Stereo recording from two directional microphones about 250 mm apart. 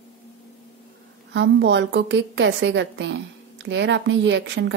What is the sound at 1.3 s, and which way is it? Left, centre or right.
A woman's voice, right.